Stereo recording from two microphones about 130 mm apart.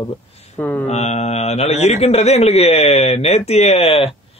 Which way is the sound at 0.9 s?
55° left (ahead or behind).